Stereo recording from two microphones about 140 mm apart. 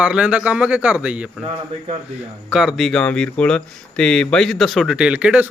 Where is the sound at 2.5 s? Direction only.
5° right (ahead or behind).